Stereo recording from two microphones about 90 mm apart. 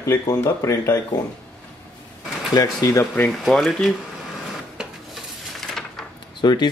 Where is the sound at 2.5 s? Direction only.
40° left (ahead or behind).